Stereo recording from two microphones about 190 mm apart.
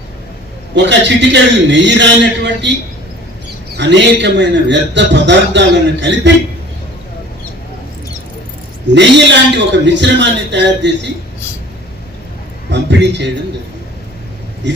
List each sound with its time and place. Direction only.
0.8 s a man's voice: 65° right (ahead or behind)
3.8 s a man's voice: 65° right (ahead or behind)
8.9 s a man's voice: 65° right (ahead or behind)
12.7 s a man's voice: 65° right (ahead or behind)
14.6 s a man's voice: 70° right (ahead or behind)